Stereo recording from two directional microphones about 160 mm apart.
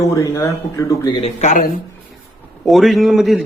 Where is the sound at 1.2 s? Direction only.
50° left (ahead or behind).